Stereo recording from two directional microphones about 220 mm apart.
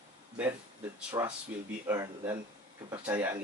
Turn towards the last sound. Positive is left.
turn(degrees=-10)  # may be behind; listen again after turning